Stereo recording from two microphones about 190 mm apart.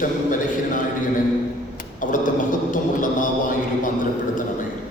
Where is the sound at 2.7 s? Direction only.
45° left (ahead or behind).